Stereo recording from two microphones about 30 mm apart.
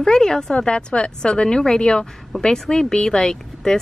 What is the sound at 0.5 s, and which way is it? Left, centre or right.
A woman's voice, left.